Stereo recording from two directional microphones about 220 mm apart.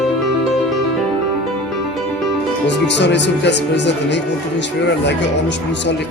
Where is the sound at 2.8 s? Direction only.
50° left (ahead or behind).